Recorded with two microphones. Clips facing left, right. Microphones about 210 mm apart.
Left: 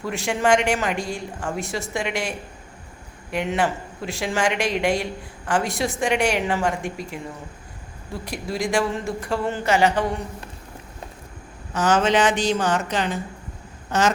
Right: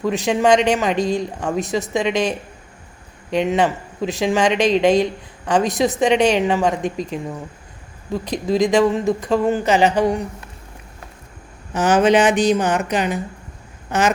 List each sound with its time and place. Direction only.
0.0 s speech: 20° right (ahead or behind)
11.7 s a woman's voice: 15° right (ahead or behind)